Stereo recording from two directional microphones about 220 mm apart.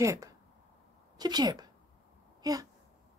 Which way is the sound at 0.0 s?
15° right (ahead or behind).